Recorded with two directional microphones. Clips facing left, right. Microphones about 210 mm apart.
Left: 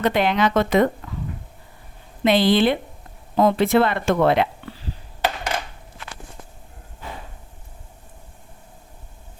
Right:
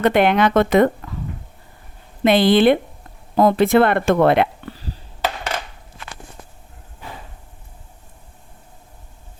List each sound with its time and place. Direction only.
0.0 s speech: 60° right (ahead or behind)
2.2 s speech: 55° right (ahead or behind)